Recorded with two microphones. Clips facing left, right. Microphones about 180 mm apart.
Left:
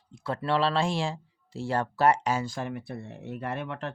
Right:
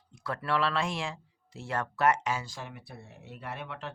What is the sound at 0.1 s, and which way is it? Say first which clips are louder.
Speech: left 4 dB; 25° left (ahead or behind).